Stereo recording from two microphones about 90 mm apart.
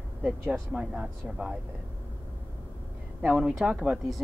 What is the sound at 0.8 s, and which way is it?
Speech, 10° right (ahead or behind).